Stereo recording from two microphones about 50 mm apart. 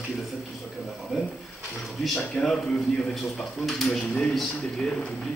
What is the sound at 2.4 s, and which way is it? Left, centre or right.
Speech, centre.